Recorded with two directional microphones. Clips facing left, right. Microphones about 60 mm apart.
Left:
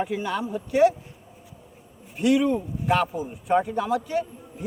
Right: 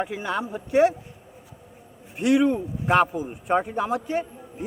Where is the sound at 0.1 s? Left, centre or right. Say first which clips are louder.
Left 1 dB; right.